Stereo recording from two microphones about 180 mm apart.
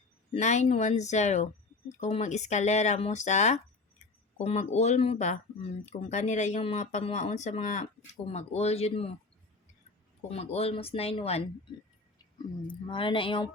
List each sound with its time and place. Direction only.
0.3 s speech: 40° left (ahead or behind)
10.3 s speech: 35° left (ahead or behind)
12.6 s speech: 30° left (ahead or behind)